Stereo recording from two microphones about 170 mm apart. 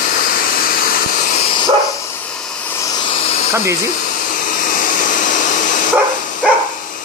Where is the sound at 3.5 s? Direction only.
15° right (ahead or behind).